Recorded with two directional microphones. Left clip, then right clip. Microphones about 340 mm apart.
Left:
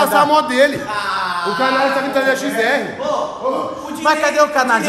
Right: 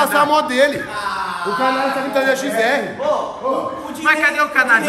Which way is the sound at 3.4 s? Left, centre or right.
Centre.